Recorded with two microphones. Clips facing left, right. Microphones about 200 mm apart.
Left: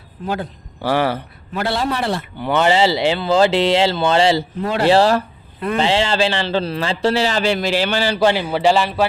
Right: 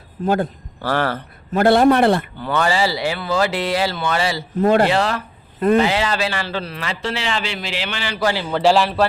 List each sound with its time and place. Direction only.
0.2 s a man's voice: 40° right (ahead or behind)
0.8 s speech: 15° left (ahead or behind)
1.5 s a man's voice: 50° right (ahead or behind)
2.4 s speech: 20° left (ahead or behind)
4.6 s speech: 50° right (ahead or behind)
4.9 s a man's voice: 35° left (ahead or behind)
8.6 s a man's voice: centre (ahead or behind)